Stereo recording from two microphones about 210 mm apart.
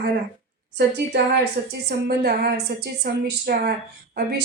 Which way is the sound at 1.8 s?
50° right (ahead or behind).